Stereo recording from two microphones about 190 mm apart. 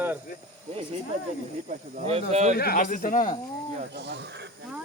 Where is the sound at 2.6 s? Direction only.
50° left (ahead or behind).